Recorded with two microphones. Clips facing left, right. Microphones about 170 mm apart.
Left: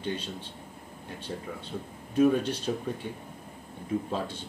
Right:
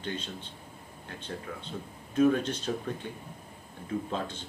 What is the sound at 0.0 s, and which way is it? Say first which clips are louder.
Speech: left 3 dB; 10° left (ahead or behind).